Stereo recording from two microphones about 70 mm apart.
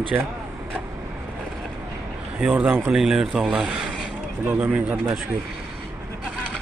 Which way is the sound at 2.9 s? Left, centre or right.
Centre.